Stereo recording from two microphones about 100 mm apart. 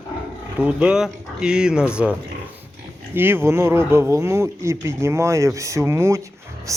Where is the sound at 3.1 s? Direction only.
20° right (ahead or behind).